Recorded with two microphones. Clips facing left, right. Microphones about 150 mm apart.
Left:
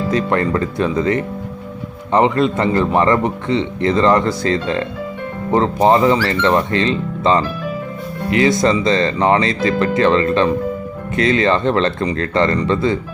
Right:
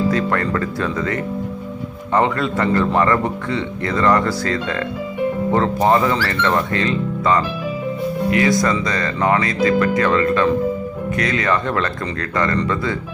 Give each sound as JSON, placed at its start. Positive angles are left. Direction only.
{"t": 0.1, "sound": "a man's voice", "side_deg": 20}